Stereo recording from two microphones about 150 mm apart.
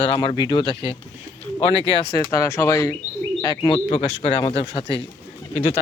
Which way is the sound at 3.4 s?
30° left (ahead or behind).